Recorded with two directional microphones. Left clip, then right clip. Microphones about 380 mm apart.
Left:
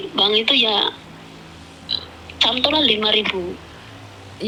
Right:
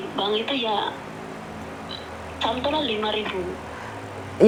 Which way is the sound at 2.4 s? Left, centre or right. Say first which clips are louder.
Left 7 dB; left.